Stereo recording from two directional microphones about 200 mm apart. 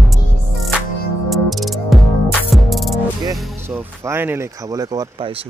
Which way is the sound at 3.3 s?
5° right (ahead or behind).